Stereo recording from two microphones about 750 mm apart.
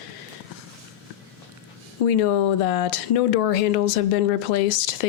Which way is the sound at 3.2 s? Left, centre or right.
Left.